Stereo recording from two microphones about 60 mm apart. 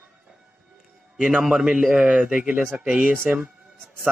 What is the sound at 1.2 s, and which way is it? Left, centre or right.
A man's voice, right.